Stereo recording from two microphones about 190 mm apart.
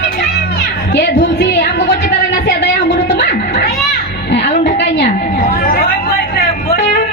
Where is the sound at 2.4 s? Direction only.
65° left (ahead or behind).